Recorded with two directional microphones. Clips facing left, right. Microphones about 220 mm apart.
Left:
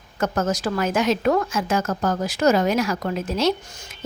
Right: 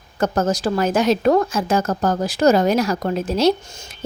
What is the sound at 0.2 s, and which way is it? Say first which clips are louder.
A woman's voice: right 3 dB; 35° right (ahead or behind).